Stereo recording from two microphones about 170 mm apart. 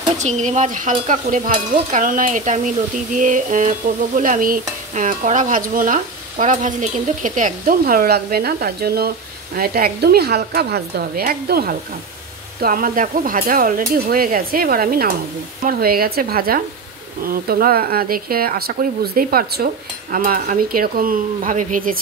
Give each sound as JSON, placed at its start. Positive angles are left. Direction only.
{"t": 0.2, "sound": "stir", "side_deg": -40}
{"t": 9.6, "sound": "a woman's voice", "side_deg": -65}